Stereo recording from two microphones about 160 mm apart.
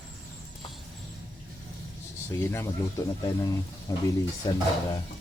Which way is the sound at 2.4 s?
15° left (ahead or behind).